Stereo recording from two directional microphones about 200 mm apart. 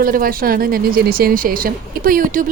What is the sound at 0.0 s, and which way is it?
Speech, 45° right (ahead or behind).